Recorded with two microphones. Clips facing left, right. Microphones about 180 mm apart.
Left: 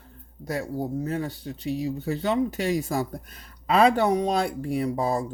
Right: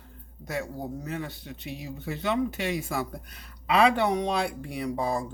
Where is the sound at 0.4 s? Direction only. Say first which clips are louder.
Left 4 dB; 40° left (ahead or behind).